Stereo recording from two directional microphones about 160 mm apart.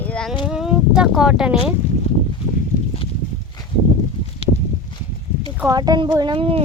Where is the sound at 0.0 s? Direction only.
5° left (ahead or behind).